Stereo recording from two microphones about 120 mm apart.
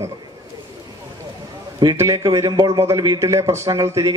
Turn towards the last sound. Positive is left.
turn(degrees=-25)  # may be behind; listen again after turning